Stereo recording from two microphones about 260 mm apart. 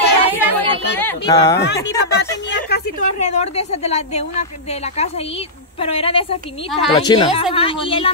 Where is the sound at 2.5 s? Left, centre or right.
Left.